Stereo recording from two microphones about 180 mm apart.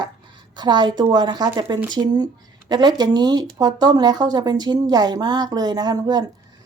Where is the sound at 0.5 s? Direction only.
25° right (ahead or behind).